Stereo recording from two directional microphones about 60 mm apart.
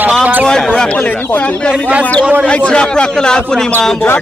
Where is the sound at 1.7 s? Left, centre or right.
Right.